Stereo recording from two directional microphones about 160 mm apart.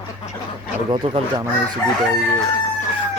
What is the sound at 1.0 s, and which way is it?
Speech, 40° right (ahead or behind).